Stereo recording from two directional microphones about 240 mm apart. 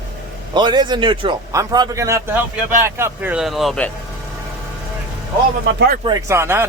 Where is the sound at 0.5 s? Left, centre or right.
Centre.